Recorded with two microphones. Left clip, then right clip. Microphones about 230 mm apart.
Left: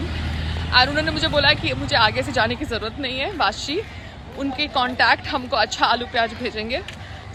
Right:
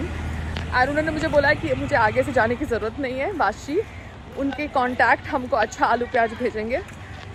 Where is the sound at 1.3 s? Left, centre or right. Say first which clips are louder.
Even; centre.